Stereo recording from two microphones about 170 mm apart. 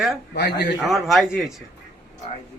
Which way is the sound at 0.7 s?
Centre (ahead or behind).